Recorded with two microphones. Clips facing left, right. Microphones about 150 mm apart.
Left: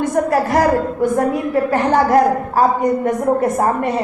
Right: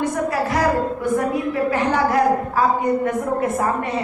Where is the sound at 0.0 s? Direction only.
45° left (ahead or behind).